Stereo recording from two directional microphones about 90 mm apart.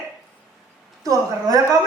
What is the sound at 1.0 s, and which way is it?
Speech, 40° right (ahead or behind).